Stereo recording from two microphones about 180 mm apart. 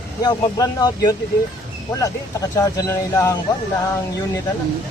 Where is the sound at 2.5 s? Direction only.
15° left (ahead or behind).